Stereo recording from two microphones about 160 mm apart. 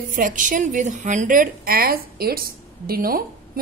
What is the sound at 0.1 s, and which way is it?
A woman's voice, 55° right (ahead or behind).